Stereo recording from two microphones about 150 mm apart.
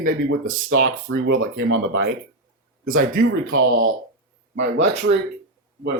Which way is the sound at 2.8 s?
70° right (ahead or behind).